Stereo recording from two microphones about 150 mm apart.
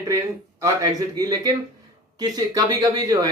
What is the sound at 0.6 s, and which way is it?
Speech, 25° right (ahead or behind).